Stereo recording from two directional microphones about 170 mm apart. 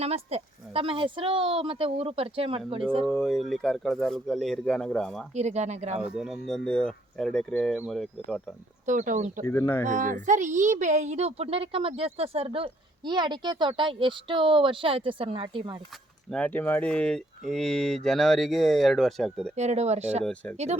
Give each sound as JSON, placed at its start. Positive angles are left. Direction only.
{"t": 0.0, "sound": "speech", "side_deg": -35}
{"t": 3.1, "sound": "speech", "side_deg": 0}
{"t": 5.3, "sound": "speech", "side_deg": -40}
{"t": 6.1, "sound": "speech", "side_deg": 0}
{"t": 8.9, "sound": "speech", "side_deg": -45}
{"t": 9.5, "sound": "speech", "side_deg": 10}
{"t": 9.8, "sound": "speech", "side_deg": -50}
{"t": 16.3, "sound": "speech", "side_deg": 10}
{"t": 19.5, "sound": "speech", "side_deg": -40}
{"t": 20.2, "sound": "speech", "side_deg": 5}